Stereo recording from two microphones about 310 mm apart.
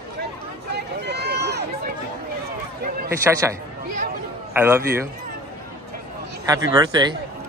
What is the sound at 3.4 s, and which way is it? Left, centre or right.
A man's voice, centre.